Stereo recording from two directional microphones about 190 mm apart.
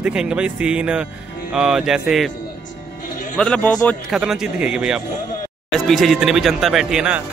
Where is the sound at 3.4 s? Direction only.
5° left (ahead or behind).